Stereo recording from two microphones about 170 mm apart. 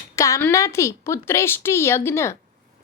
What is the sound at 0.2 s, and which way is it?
Speech, 15° left (ahead or behind).